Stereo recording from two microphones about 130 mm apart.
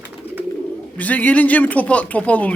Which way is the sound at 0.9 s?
10° left (ahead or behind).